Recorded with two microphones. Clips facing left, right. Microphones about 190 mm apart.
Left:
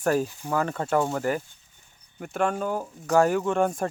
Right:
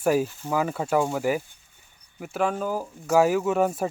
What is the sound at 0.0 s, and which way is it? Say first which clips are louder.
Speech: right 2 dB; 10° right (ahead or behind).